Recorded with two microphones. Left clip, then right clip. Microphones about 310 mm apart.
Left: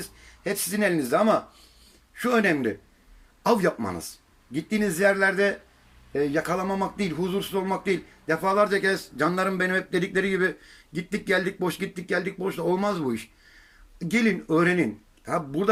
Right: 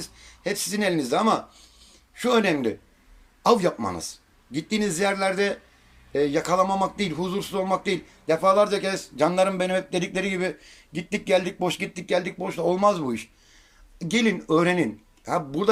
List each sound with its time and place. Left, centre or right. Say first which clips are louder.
0.0 s speech: right 2 dB; centre